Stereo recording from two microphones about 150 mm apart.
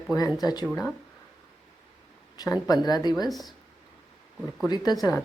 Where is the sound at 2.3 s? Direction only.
25° left (ahead or behind).